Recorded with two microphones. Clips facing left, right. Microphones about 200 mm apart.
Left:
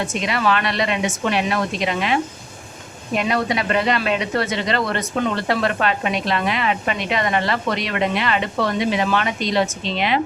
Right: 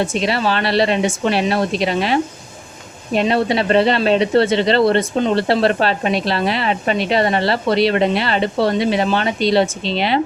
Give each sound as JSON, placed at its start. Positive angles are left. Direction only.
{"t": 0.0, "sound": "speech", "side_deg": -30}